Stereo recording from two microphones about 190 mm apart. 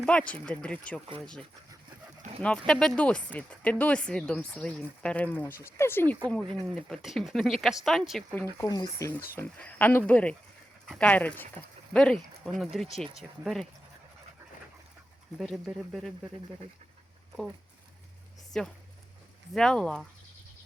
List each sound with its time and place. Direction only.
0.0 s speech: 5° left (ahead or behind)
8.5 s speech: 20° left (ahead or behind); by 13.7 s centre (ahead or behind)
15.4 s speech: centre (ahead or behind)
18.5 s speech: centre (ahead or behind)